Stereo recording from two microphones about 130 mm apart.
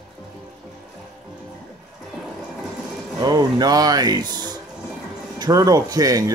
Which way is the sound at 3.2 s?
30° right (ahead or behind).